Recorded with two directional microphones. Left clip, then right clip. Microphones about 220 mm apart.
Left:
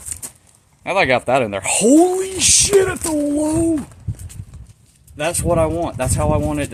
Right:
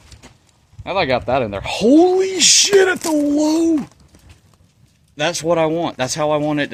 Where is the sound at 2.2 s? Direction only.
40° right (ahead or behind).